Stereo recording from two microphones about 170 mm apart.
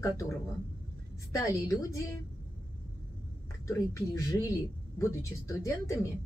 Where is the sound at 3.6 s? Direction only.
20° left (ahead or behind).